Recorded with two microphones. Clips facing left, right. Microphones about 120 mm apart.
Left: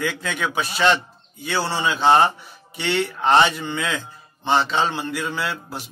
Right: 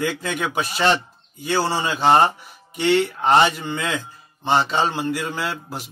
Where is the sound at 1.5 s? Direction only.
45° right (ahead or behind).